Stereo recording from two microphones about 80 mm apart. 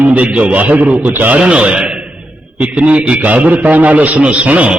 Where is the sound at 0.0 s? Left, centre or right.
Centre.